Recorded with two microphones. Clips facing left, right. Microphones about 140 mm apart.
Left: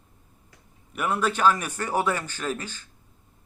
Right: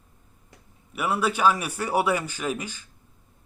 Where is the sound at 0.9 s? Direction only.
5° right (ahead or behind).